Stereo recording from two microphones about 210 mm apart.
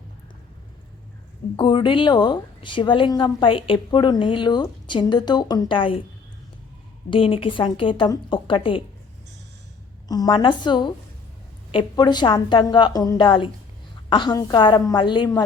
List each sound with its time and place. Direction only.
1.5 s speech: 20° left (ahead or behind)
7.1 s speech: 25° left (ahead or behind)
10.1 s speech: 20° left (ahead or behind)